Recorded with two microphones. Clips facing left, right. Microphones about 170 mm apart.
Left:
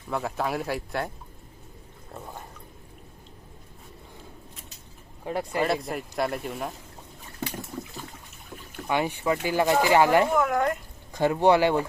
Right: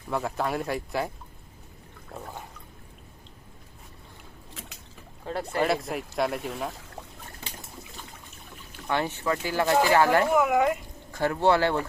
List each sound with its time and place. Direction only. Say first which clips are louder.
0.1 s speech: even; centre (ahead or behind)
5.2 s speech: left 1 dB; 15° left (ahead or behind)
5.6 s speech: even; centre (ahead or behind)
8.9 s speech: left 2 dB; 15° left (ahead or behind)
10.3 s speech: right 2 dB; 5° right (ahead or behind)
11.1 s speech: left 3 dB; 15° left (ahead or behind)